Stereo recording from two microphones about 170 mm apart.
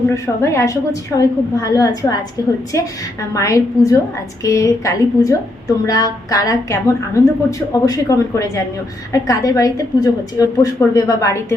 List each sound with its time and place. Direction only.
0.4 s a woman's voice: 20° left (ahead or behind)